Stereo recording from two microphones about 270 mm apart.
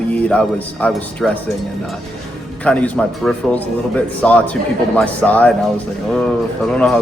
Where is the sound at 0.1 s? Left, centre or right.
Centre.